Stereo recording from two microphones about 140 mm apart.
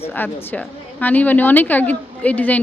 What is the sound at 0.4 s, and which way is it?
A woman's voice, 10° left (ahead or behind).